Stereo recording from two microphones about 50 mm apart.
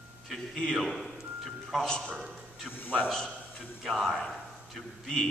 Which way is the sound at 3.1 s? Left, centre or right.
Centre.